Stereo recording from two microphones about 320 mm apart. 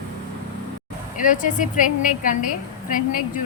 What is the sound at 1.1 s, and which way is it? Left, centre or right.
A woman's voice, left.